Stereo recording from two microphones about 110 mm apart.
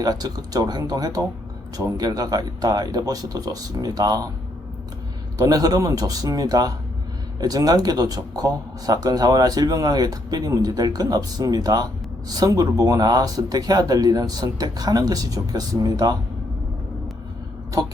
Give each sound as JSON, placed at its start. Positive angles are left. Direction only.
{"t": 0.0, "sound": "speech", "side_deg": -35}
{"t": 5.4, "sound": "speech", "side_deg": -35}